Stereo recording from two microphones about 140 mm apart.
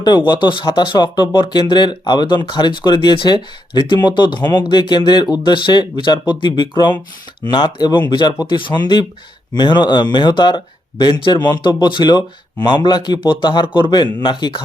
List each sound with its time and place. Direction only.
0.0 s speech: 35° left (ahead or behind)